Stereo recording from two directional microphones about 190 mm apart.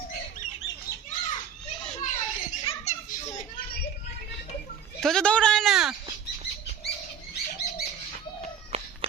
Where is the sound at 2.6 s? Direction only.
35° left (ahead or behind).